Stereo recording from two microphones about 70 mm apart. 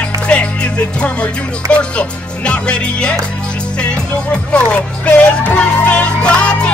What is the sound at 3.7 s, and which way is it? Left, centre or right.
Speech, centre.